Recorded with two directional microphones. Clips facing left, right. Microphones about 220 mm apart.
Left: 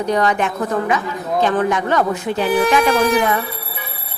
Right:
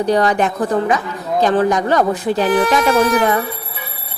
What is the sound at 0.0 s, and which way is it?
A woman's voice, 35° right (ahead or behind).